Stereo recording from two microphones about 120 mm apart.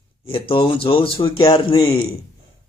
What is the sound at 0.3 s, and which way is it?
Speech, 50° left (ahead or behind).